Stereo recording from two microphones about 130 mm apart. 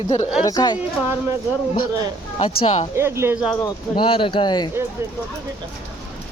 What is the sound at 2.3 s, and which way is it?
Speech, 45° left (ahead or behind).